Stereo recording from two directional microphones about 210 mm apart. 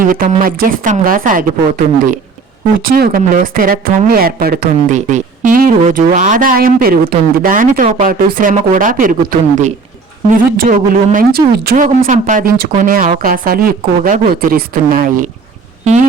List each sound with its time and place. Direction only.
0.0 s speech: 40° right (ahead or behind)